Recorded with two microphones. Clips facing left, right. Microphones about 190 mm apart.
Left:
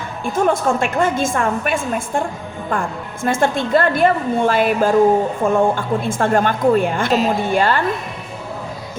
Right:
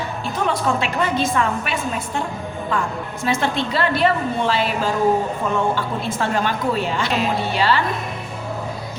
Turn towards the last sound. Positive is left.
turn(degrees=50)  # may be behind; listen again after turning